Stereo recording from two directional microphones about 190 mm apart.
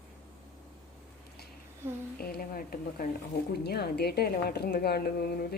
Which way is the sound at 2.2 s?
50° left (ahead or behind).